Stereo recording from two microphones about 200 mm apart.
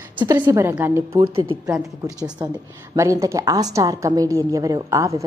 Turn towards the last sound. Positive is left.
turn(degrees=-15)  # may be behind; listen again after turning